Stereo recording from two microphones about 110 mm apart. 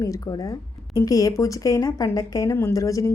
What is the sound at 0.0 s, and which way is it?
A woman's voice, 30° left (ahead or behind).